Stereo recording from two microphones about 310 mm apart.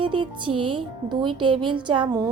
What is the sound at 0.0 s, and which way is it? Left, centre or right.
Speech, centre.